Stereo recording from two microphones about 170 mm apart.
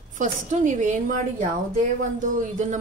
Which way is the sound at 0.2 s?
45° right (ahead or behind).